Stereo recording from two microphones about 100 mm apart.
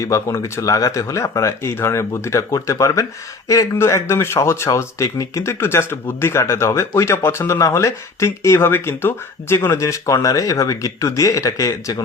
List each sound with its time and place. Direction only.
0.0 s speech: 30° left (ahead or behind)